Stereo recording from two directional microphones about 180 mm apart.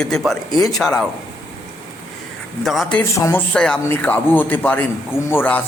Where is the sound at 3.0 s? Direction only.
15° left (ahead or behind).